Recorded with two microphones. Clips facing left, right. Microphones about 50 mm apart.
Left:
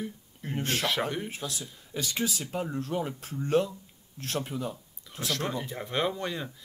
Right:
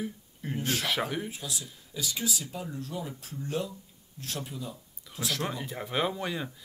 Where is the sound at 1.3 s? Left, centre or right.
Left.